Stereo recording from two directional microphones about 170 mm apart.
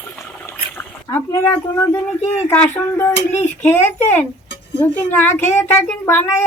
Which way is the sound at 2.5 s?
15° left (ahead or behind).